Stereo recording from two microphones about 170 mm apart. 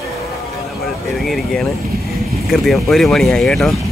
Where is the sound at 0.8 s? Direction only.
Centre (ahead or behind).